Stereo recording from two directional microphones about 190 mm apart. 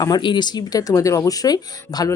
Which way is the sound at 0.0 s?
25° left (ahead or behind).